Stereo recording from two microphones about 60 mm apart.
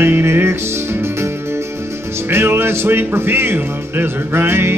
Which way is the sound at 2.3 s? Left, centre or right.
Right.